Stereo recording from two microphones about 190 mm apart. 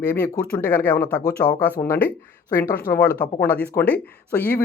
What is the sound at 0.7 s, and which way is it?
Speech, 10° left (ahead or behind).